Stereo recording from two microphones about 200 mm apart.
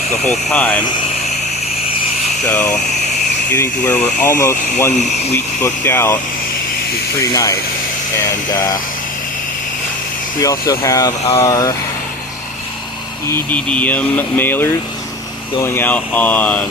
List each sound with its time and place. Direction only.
0.3 s speech: 5° left (ahead or behind)
2.5 s speech: 10° left (ahead or behind)
7.2 s speech: 15° left (ahead or behind)
10.4 s speech: 15° left (ahead or behind)
13.2 s speech: 10° left (ahead or behind)